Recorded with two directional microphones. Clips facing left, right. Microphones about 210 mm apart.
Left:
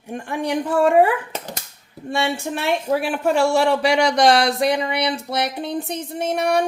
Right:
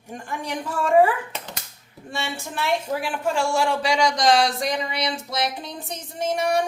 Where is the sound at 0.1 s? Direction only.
60° left (ahead or behind).